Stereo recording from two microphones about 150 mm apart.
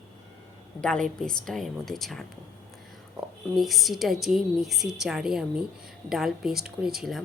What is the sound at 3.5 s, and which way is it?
Speech, centre (ahead or behind).